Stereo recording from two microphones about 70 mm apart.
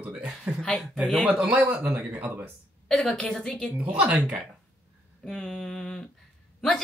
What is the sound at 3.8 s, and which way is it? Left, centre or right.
Speech, centre.